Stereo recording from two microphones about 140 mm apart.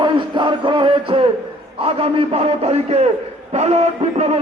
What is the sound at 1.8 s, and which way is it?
A man's voice, 45° right (ahead or behind).